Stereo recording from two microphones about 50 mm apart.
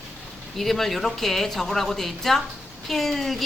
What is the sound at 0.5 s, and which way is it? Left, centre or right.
A woman's voice, centre.